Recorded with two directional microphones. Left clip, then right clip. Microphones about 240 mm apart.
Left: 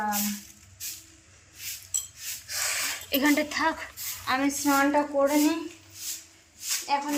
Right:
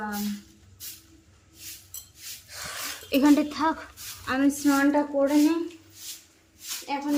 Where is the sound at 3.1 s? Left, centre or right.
Right.